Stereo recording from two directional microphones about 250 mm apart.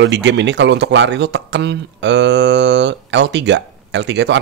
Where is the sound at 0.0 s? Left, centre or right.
Right.